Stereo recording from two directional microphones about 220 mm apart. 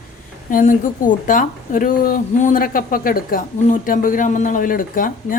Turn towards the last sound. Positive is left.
turn(degrees=40)  # may be behind; listen again after turning